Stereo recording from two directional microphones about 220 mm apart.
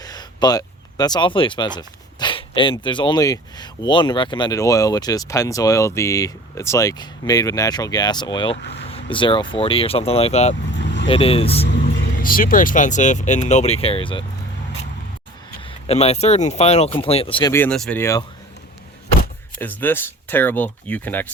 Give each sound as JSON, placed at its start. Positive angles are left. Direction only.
{"t": 0.0, "sound": "a sound", "side_deg": 20}
{"t": 2.7, "sound": "speech", "side_deg": 20}
{"t": 10.8, "sound": "vehicle", "side_deg": 55}
{"t": 11.0, "sound": "speech", "side_deg": 25}
{"t": 12.1, "sound": "speech", "side_deg": 40}
{"t": 15.9, "sound": "speech", "side_deg": 30}
{"t": 17.5, "sound": "speech", "side_deg": 5}
{"t": 19.5, "sound": "speech", "side_deg": 10}